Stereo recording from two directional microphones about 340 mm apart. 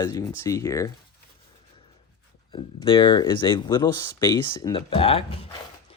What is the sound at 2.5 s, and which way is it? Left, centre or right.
Speech, centre.